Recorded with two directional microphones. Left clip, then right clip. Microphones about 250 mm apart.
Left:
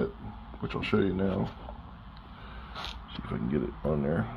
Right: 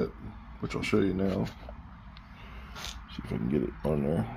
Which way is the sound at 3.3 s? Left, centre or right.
Centre.